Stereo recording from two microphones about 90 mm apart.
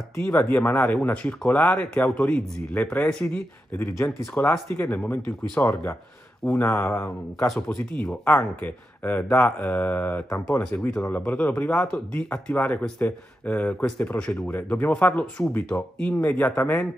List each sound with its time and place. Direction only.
0.1 s speech: 30° left (ahead or behind); by 3.3 s 15° left (ahead or behind)
3.3 s speech: 25° left (ahead or behind)
7.6 s speech: 15° left (ahead or behind)
10.9 s speech: 10° left (ahead or behind)